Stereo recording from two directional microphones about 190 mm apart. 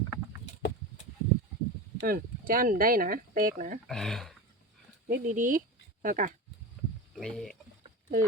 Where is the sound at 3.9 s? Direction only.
Centre (ahead or behind).